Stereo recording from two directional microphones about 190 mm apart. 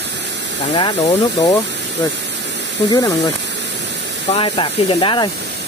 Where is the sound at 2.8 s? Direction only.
20° left (ahead or behind).